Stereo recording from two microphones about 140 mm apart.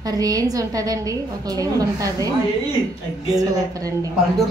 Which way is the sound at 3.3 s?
25° right (ahead or behind).